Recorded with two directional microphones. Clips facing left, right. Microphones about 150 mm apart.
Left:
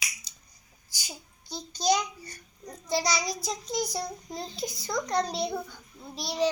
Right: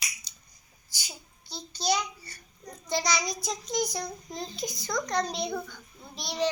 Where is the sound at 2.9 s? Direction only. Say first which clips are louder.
Left 1 dB; 5° left (ahead or behind).